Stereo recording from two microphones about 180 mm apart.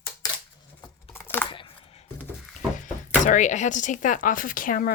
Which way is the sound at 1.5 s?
30° left (ahead or behind).